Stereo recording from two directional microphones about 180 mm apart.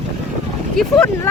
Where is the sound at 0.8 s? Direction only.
5° left (ahead or behind).